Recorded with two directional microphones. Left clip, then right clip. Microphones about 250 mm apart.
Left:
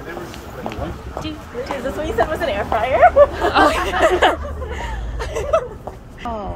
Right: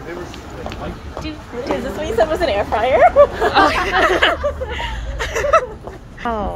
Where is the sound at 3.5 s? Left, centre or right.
Centre.